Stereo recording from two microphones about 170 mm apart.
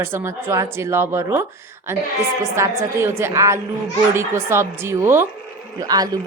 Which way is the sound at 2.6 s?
15° right (ahead or behind).